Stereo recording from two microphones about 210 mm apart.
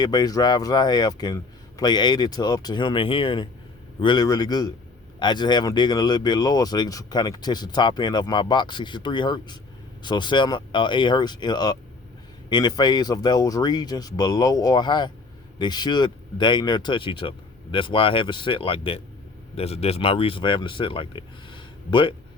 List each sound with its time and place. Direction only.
0.0 s speech: 20° left (ahead or behind)